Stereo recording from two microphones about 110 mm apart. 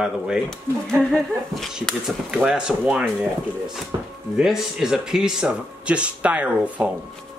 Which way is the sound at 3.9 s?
30° right (ahead or behind).